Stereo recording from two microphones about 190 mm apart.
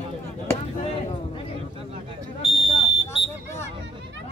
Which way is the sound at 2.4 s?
25° left (ahead or behind).